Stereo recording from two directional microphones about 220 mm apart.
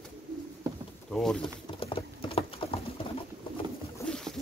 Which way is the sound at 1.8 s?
25° left (ahead or behind).